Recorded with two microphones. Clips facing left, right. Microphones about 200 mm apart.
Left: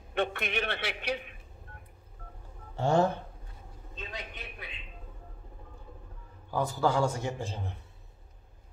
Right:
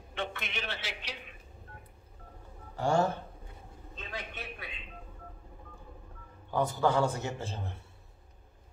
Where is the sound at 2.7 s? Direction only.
25° left (ahead or behind).